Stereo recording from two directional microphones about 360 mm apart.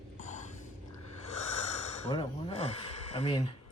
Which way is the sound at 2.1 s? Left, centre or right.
Centre.